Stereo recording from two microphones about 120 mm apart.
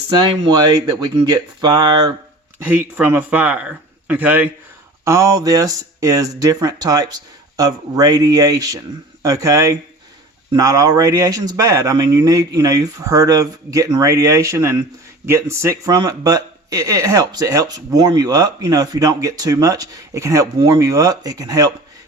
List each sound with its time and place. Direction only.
0.1 s speech: 40° right (ahead or behind)
2.6 s speech: 15° right (ahead or behind)
5.0 s speech: 25° right (ahead or behind)